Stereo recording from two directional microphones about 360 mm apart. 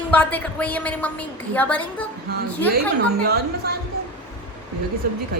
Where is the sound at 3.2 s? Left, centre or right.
Right.